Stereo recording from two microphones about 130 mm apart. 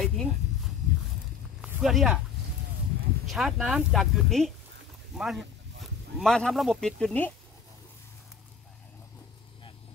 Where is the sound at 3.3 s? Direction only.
Centre (ahead or behind).